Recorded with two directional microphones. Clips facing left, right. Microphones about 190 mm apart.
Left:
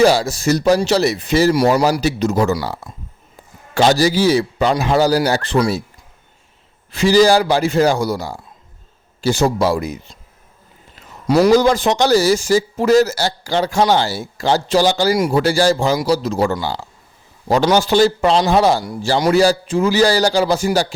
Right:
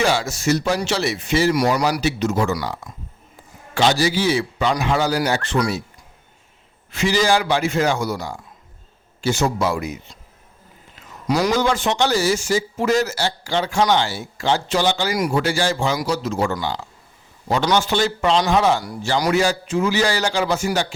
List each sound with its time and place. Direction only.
0.0 s a man's voice: 35° left (ahead or behind)
6.9 s a man's voice: 35° left (ahead or behind)
11.3 s a man's voice: 25° left (ahead or behind)